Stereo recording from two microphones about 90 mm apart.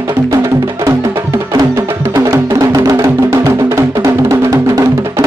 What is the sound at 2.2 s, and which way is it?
Music, 30° right (ahead or behind).